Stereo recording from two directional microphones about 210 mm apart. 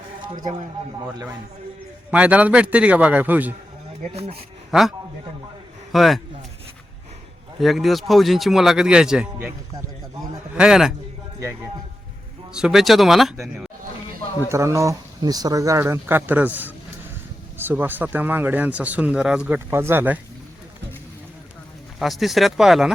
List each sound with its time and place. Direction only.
2.0 s speech: 5° right (ahead or behind)
4.1 s speech: 30° right (ahead or behind)
4.7 s a man's voice: centre (ahead or behind)
7.6 s speech: centre (ahead or behind)
10.5 s a man's voice: 5° right (ahead or behind)
12.5 s speech: centre (ahead or behind)
14.5 s speech: 15° right (ahead or behind)
21.9 s speech: centre (ahead or behind)